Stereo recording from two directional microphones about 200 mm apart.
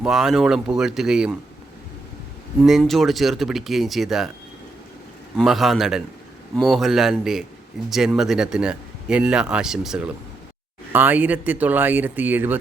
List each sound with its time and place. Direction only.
0.0 s speech: centre (ahead or behind)
2.6 s speech: centre (ahead or behind)
5.4 s speech: centre (ahead or behind)